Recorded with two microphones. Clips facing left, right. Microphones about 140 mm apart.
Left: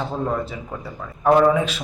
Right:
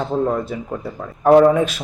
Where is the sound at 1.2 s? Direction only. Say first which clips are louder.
Right 4 dB; 40° right (ahead or behind).